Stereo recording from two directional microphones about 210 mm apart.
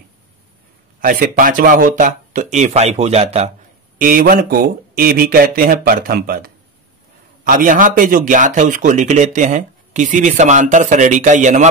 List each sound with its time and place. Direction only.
1.0 s speech: 40° right (ahead or behind)
4.0 s speech: 45° right (ahead or behind)